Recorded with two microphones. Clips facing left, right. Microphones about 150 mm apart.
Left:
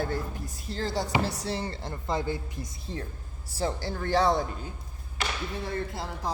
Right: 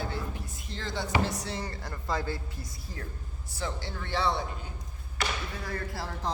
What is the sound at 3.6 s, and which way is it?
Speech, 35° left (ahead or behind).